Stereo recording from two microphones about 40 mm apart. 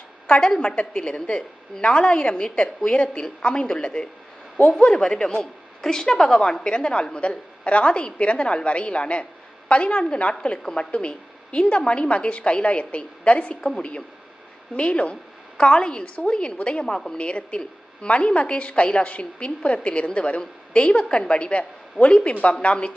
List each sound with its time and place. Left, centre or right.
0.3 s a woman's voice: left
13.6 s a woman's voice: centre
14.8 s a woman's voice: left